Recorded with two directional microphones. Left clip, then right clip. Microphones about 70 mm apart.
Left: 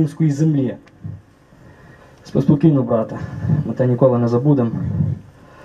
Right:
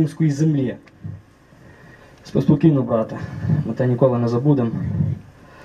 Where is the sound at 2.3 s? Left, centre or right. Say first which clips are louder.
Left 1 dB; left.